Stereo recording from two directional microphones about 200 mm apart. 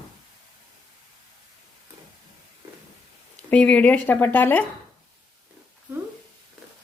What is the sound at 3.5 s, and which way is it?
Speech, 5° left (ahead or behind).